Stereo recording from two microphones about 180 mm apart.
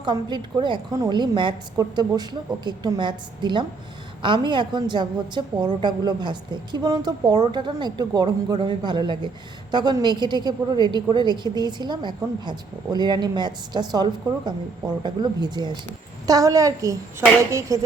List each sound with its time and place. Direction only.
0.0 s a woman's voice: 25° right (ahead or behind)